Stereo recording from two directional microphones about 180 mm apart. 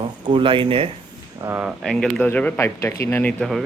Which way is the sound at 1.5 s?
10° right (ahead or behind).